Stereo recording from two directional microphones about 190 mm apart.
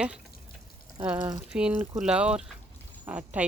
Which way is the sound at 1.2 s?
20° right (ahead or behind).